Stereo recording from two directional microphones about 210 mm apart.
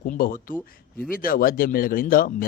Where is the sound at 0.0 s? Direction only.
40° left (ahead or behind).